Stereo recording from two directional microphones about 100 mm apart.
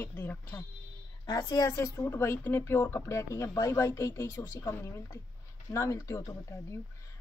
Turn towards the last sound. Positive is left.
turn(degrees=30)  # may be behind; listen again after turning